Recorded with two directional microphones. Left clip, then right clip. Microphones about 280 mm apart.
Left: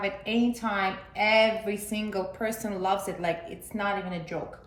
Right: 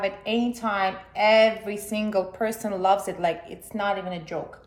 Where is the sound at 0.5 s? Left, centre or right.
Centre.